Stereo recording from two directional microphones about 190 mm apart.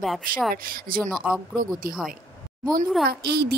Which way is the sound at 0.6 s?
50° right (ahead or behind).